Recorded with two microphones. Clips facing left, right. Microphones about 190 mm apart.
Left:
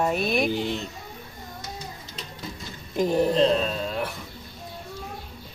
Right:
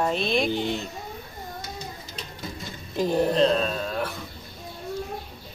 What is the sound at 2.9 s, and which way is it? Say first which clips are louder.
Speech: left 1 dB; 15° left (ahead or behind).